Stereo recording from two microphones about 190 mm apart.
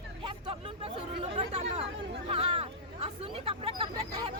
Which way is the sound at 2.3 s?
25° right (ahead or behind).